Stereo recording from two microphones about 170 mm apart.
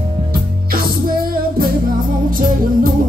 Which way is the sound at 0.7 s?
60° right (ahead or behind).